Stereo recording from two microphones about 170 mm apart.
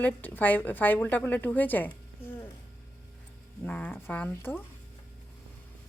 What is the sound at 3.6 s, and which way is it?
A woman's voice, 10° left (ahead or behind).